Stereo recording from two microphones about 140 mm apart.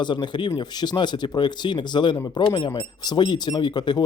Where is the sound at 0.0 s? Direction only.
35° left (ahead or behind).